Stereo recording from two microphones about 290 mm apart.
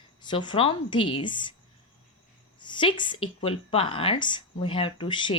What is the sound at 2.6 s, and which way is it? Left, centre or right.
A woman's voice, centre.